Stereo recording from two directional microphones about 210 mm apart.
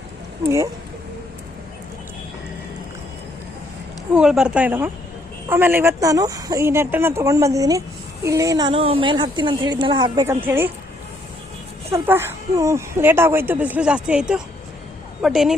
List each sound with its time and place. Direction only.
0.4 s speech: 15° right (ahead or behind)
4.1 s a woman's voice: 5° right (ahead or behind)
11.9 s a woman's voice: 10° right (ahead or behind)